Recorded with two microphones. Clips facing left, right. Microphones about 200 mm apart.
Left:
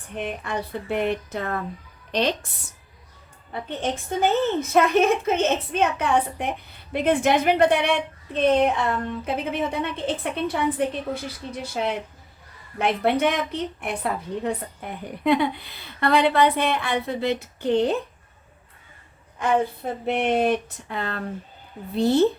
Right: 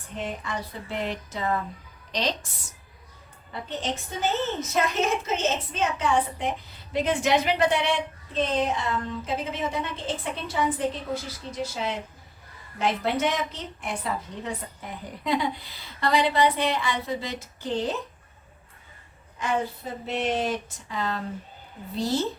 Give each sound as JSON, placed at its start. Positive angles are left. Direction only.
{"t": 0.2, "sound": "a woman's voice", "side_deg": 60}
{"t": 3.5, "sound": "a woman's voice", "side_deg": 55}
{"t": 19.4, "sound": "a woman's voice", "side_deg": 55}